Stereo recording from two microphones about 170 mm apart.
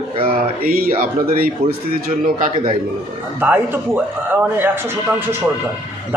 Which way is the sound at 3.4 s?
10° right (ahead or behind).